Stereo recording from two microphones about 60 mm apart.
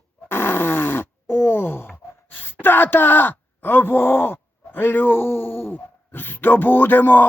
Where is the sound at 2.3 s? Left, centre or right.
Left.